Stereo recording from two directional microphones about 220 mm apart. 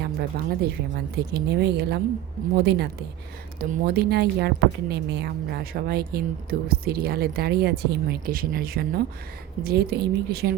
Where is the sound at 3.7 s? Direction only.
45° right (ahead or behind).